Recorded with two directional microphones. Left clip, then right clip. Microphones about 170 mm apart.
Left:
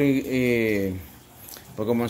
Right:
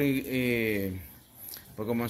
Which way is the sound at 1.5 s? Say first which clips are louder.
Left 7 dB; 10° left (ahead or behind).